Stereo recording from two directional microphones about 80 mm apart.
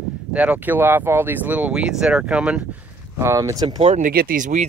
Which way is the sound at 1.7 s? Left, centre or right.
Centre.